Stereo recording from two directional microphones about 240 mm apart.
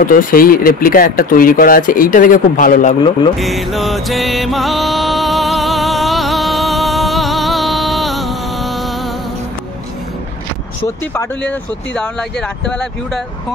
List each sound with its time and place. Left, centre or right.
0.0 s speech: left
3.3 s music: centre
11.1 s speech: centre